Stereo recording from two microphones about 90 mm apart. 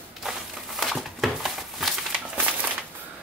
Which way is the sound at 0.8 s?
Centre (ahead or behind).